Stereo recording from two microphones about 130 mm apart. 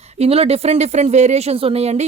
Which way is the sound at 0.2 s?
50° right (ahead or behind).